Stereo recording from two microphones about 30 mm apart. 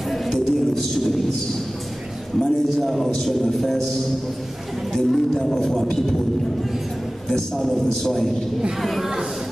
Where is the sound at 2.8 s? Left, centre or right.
Centre.